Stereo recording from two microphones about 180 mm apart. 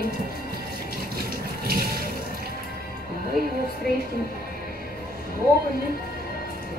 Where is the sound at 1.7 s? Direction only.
55° right (ahead or behind).